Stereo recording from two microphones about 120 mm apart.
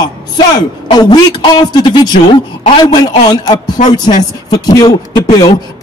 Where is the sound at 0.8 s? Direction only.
35° left (ahead or behind).